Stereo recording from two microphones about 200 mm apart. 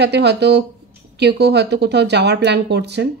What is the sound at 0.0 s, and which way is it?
A woman's voice, 55° right (ahead or behind).